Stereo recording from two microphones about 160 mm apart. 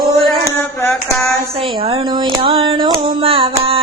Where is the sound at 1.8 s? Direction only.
35° right (ahead or behind).